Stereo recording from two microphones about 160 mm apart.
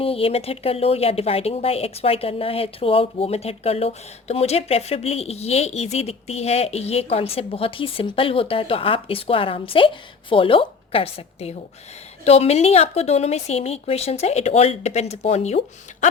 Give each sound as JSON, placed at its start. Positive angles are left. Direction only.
{"t": 0.0, "sound": "speech", "side_deg": 35}